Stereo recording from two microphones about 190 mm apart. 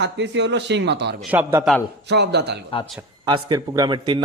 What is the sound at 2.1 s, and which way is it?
Speech, 65° right (ahead or behind).